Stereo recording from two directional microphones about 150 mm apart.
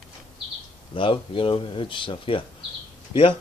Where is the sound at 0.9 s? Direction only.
35° left (ahead or behind).